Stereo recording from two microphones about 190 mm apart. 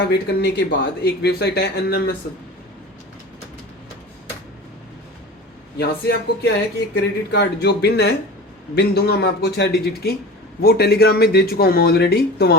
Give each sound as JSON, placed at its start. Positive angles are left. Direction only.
{"t": 0.1, "sound": "speech", "side_deg": 60}
{"t": 5.7, "sound": "speech", "side_deg": 60}